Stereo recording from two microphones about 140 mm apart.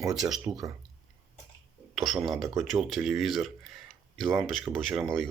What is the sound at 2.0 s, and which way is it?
Speech, centre (ahead or behind).